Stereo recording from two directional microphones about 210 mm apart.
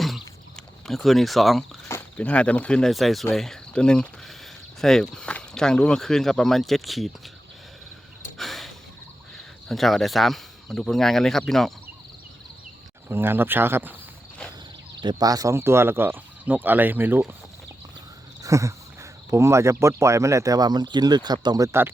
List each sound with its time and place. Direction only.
0.0 s a sound: centre (ahead or behind)
1.9 s speech: 10° left (ahead or behind)
8.4 s gasp: centre (ahead or behind)
9.6 s speech: centre (ahead or behind)
13.1 s speech: 10° right (ahead or behind)
15.0 s speech: 15° right (ahead or behind)
18.4 s cricket: 15° right (ahead or behind)
19.3 s speech: 15° right (ahead or behind)